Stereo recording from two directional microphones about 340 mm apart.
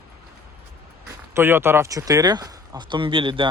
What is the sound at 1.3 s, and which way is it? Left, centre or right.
Speech, centre.